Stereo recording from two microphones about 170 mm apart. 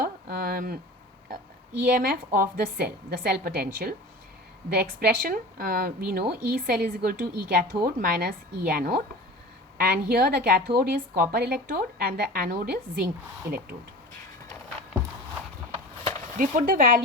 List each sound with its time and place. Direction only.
0.0 s a sound: 55° right (ahead or behind)
1.9 s speech: 55° right (ahead or behind)
16.4 s speech: 55° right (ahead or behind)